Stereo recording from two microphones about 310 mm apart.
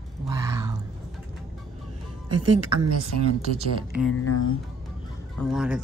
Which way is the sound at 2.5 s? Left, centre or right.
Right.